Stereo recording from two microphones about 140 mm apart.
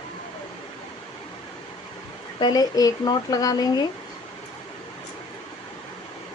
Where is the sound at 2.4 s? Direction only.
25° left (ahead or behind).